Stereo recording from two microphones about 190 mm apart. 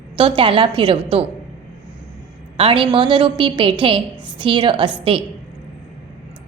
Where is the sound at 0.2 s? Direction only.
25° right (ahead or behind).